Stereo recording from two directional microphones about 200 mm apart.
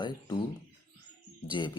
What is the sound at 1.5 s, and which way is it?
Speech, 25° left (ahead or behind).